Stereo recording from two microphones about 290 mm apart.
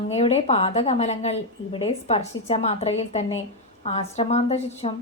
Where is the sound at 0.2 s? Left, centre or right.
Left.